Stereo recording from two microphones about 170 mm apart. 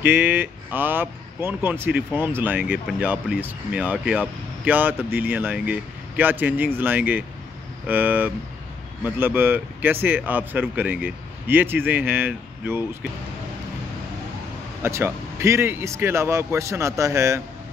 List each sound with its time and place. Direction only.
0.0 s speech: 10° right (ahead or behind)
14.8 s speech: 15° right (ahead or behind)